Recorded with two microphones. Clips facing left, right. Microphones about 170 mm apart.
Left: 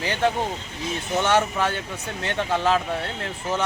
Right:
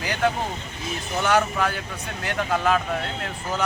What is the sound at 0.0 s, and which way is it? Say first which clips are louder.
Vehicle: left 1 dB; 30° left (ahead or behind).